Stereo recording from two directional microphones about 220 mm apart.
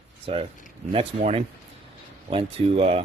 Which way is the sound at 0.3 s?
25° right (ahead or behind).